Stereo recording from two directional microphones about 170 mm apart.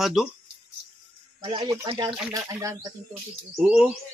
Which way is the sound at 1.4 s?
20° right (ahead or behind).